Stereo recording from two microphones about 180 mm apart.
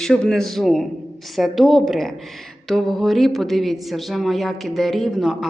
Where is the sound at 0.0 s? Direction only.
Centre (ahead or behind).